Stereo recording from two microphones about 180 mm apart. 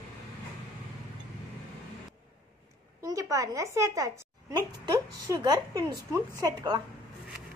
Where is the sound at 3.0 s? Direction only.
20° right (ahead or behind).